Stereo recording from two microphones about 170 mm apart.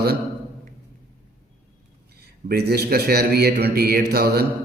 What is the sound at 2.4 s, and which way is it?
A man's voice, 70° right (ahead or behind).